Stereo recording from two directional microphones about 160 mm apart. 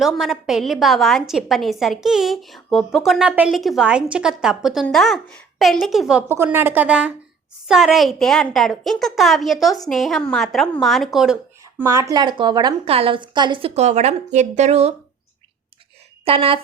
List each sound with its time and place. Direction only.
0.0 s a woman's voice: centre (ahead or behind)
11.8 s a woman's voice: 15° right (ahead or behind); by 14.9 s 40° right (ahead or behind)
16.2 s a woman's voice: 35° right (ahead or behind)